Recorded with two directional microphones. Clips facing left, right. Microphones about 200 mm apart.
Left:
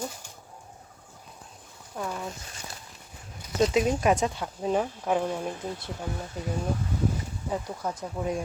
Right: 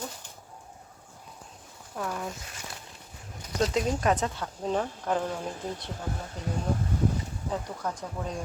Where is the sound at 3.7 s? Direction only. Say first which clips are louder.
Left 2 dB; 10° left (ahead or behind).